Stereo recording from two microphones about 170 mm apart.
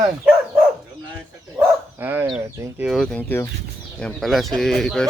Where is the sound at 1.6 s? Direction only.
20° right (ahead or behind).